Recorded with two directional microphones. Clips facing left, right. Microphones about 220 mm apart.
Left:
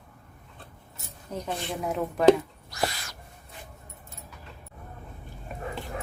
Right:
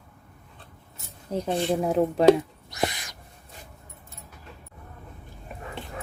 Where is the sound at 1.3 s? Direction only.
30° right (ahead or behind).